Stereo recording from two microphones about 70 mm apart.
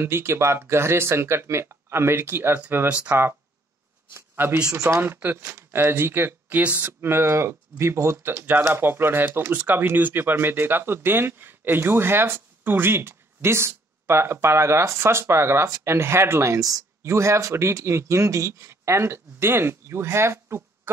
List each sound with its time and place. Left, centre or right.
0.0 s speech: right